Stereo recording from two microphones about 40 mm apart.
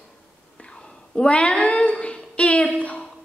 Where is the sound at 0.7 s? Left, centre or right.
Left.